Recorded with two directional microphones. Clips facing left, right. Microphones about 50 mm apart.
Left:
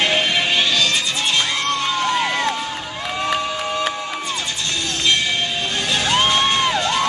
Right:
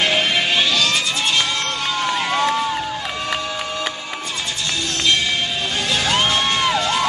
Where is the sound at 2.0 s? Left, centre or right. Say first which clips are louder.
Right 1 dB; centre.